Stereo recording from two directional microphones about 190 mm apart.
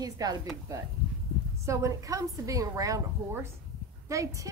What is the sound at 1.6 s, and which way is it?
A woman's voice, 15° right (ahead or behind).